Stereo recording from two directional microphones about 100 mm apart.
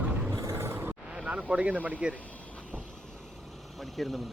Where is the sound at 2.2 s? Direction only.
15° left (ahead or behind).